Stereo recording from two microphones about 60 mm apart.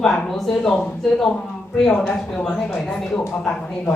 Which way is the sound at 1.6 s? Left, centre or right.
Centre.